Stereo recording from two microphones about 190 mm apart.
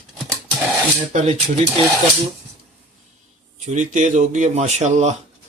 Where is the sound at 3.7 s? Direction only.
40° right (ahead or behind).